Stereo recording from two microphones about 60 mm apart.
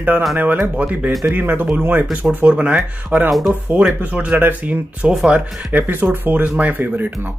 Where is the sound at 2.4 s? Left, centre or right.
Centre.